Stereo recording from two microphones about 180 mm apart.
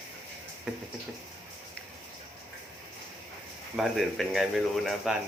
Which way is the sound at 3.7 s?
Centre (ahead or behind).